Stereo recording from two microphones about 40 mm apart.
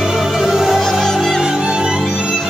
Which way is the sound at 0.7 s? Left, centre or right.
Centre.